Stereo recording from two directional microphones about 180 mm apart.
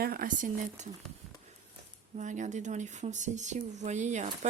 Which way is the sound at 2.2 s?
40° right (ahead or behind).